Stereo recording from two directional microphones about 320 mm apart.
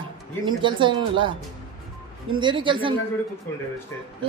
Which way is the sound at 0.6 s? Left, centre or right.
Centre.